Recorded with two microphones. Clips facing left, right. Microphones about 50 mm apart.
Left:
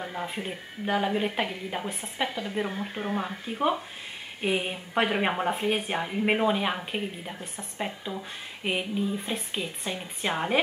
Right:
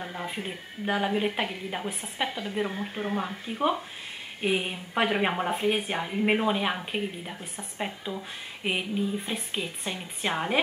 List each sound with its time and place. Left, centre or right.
0.0 s speech: centre